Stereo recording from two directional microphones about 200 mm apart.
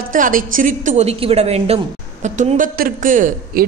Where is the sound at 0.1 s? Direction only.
40° right (ahead or behind).